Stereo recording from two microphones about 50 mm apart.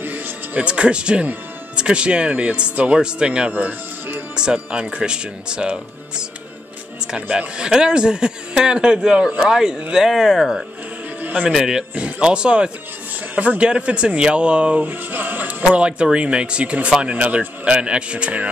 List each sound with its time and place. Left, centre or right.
0.0 s music: right
0.7 s speech: right
3.5 s music: right
4.4 s speech: centre
14.9 s speech: right
15.7 s speech: right